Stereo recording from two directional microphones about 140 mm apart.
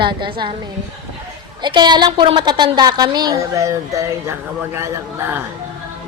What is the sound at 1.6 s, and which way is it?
A woman's voice, 30° right (ahead or behind).